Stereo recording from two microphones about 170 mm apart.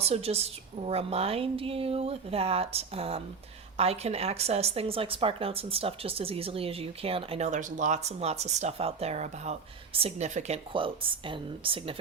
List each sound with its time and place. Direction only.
0.0 s speech: 35° right (ahead or behind)
10.7 s speech: 30° right (ahead or behind)